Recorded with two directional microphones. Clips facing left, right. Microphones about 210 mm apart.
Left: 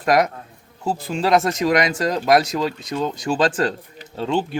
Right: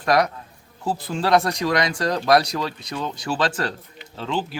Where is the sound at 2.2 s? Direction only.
15° left (ahead or behind).